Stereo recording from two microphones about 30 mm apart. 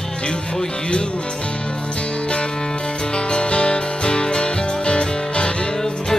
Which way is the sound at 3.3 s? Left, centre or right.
Left.